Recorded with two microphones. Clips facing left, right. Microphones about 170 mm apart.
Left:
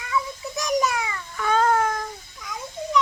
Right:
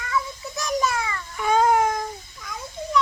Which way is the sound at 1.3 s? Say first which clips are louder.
Right 2 dB; 15° right (ahead or behind).